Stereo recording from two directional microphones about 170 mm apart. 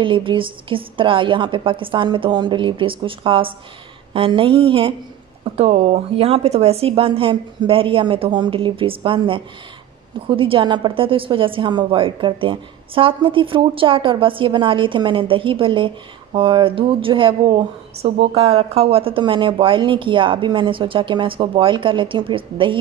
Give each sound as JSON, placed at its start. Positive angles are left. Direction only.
{"t": 0.0, "sound": "a woman's voice", "side_deg": -30}